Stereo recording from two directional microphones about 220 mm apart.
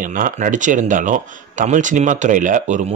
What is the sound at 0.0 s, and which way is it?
Speech, 35° right (ahead or behind).